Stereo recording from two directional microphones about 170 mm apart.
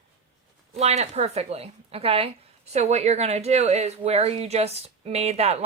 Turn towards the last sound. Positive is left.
turn(degrees=-40)  # may be behind; listen again after turning